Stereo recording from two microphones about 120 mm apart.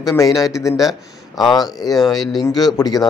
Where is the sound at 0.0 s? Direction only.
30° left (ahead or behind).